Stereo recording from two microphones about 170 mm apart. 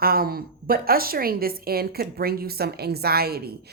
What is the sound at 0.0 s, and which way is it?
A woman's voice, 60° right (ahead or behind).